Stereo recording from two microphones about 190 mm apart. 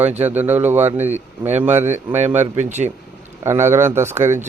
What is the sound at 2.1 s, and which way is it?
Speech, 35° right (ahead or behind).